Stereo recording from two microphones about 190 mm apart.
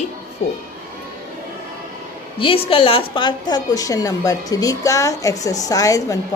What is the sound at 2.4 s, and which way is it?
A woman's voice, 30° left (ahead or behind).